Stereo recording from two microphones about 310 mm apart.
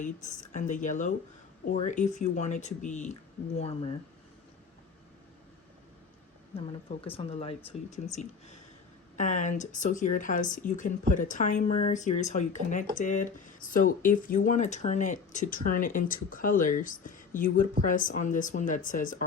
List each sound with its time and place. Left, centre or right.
0.0 s speech: left
6.7 s speech: centre